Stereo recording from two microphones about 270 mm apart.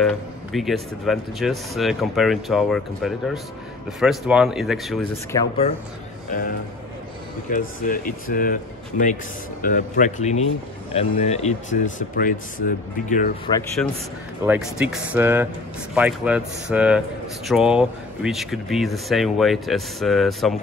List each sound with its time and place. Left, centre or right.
0.0 s speech: centre
5.3 s speech: centre
7.4 s speech: left
13.8 s speech: centre
14.4 s speech: centre